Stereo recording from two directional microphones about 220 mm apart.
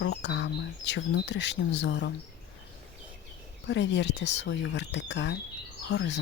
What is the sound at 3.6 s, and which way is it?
Speech, 55° left (ahead or behind).